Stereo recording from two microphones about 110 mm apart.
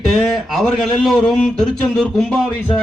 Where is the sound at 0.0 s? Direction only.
Centre (ahead or behind).